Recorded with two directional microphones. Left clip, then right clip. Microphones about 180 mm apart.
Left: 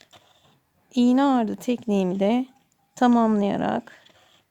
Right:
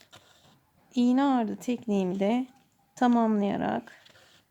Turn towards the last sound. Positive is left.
turn(degrees=-25)  # may be behind; listen again after turning